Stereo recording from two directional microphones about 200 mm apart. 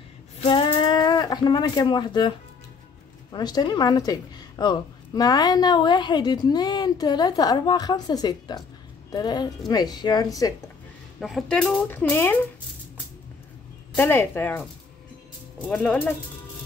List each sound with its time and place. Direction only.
0.5 s a sound: 25° left (ahead or behind)
3.3 s a woman's voice: 20° left (ahead or behind)
11.1 s speech: centre (ahead or behind)
13.9 s speech: 10° left (ahead or behind)
15.7 s speech: 5° left (ahead or behind)